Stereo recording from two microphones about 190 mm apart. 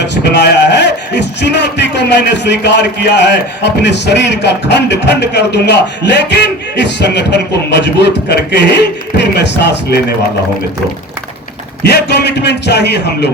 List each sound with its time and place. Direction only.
0.0 s a man's voice: 65° left (ahead or behind)
11.8 s a man's voice: 60° left (ahead or behind)